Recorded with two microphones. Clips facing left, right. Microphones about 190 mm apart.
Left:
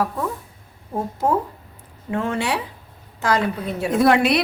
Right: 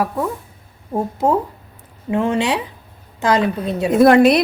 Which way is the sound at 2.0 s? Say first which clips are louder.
Right 5 dB; 15° right (ahead or behind).